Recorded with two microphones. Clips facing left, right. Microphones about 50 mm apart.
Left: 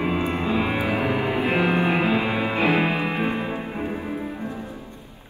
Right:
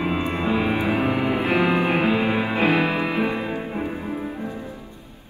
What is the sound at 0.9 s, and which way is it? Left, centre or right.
Music, left.